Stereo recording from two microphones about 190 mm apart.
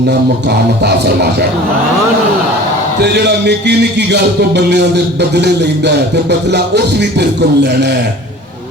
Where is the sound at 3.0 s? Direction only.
60° right (ahead or behind).